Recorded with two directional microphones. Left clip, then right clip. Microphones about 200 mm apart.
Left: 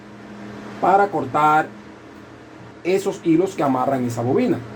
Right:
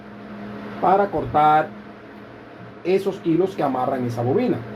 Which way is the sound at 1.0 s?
40° left (ahead or behind).